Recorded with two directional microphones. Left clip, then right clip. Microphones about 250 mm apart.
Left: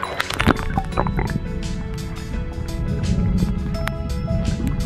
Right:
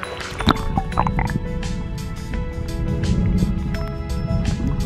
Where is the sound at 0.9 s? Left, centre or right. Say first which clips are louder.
Right 3 dB; right.